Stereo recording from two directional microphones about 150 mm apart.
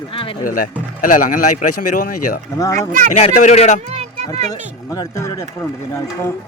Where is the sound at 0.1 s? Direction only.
35° left (ahead or behind).